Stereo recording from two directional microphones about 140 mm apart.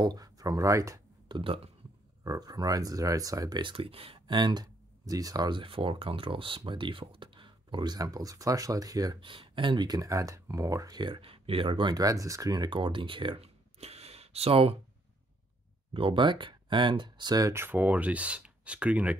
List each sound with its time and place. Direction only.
0.0 s a sound: 30° right (ahead or behind)
1.4 s speech: 40° right (ahead or behind)
2.2 s speech: 25° right (ahead or behind); by 14.8 s 45° right (ahead or behind)
15.9 s speech: 40° right (ahead or behind); by 19.1 s 10° right (ahead or behind)